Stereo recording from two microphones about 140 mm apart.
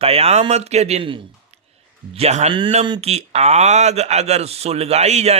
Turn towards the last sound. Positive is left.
turn(degrees=-50)  # may be behind; listen again after turning